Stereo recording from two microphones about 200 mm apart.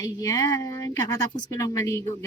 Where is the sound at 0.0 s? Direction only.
15° left (ahead or behind).